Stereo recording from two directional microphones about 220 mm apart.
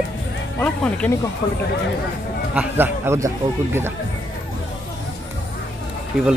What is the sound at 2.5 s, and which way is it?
A man's voice, 5° right (ahead or behind).